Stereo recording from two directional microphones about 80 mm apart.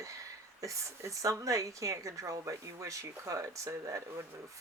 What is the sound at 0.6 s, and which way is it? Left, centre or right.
Speech, right.